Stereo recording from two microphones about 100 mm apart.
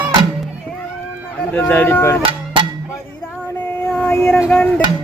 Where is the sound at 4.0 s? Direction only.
20° left (ahead or behind).